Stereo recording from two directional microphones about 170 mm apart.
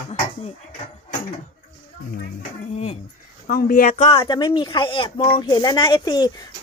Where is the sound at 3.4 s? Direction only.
60° left (ahead or behind).